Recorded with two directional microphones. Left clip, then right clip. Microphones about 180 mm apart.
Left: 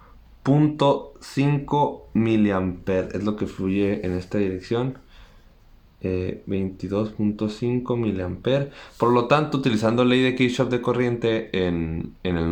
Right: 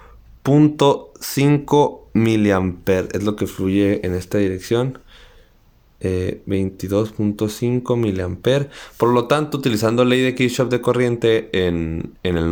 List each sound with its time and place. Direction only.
0.4 s speech: 40° right (ahead or behind)
6.0 s speech: 45° right (ahead or behind)